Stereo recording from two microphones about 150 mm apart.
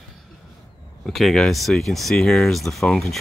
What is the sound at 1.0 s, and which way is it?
Speech, centre (ahead or behind).